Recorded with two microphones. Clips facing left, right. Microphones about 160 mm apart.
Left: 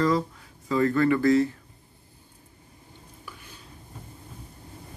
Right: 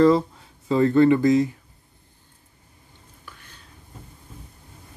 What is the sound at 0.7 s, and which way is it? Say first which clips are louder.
Speech: right 5 dB; 25° right (ahead or behind).